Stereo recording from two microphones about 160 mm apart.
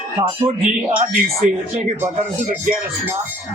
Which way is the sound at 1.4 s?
45° right (ahead or behind).